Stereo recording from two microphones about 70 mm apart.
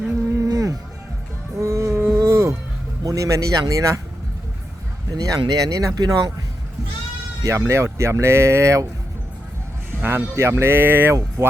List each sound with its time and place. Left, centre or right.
0.4 s a sound: right
1.5 s music: right
3.0 s speech: right
5.1 s speech: right
7.4 s speech: right
10.0 s speech: right